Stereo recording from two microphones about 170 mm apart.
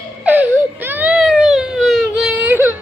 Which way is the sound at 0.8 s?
10° right (ahead or behind).